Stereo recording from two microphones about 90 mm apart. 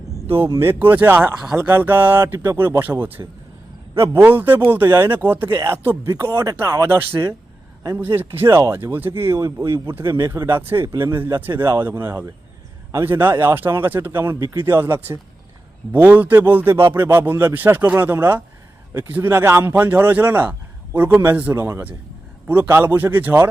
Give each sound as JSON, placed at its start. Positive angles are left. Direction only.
{"t": 0.4, "sound": "a man's voice", "side_deg": -25}
{"t": 14.3, "sound": "speech", "side_deg": -35}
{"t": 15.9, "sound": "a man's voice", "side_deg": -20}